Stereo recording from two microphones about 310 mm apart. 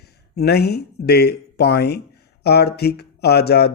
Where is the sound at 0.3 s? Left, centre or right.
Left.